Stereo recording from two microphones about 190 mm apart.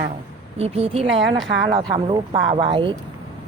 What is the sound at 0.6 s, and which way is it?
A woman's voice, 35° right (ahead or behind).